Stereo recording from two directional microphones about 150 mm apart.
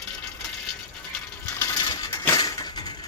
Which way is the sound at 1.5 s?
25° left (ahead or behind).